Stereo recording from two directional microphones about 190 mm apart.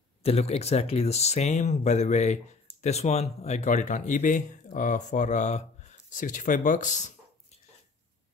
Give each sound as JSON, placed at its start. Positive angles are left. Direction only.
{"t": 0.2, "sound": "speech", "side_deg": 35}